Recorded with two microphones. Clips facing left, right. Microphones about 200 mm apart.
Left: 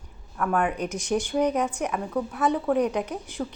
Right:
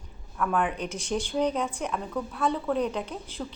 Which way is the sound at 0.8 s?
15° left (ahead or behind).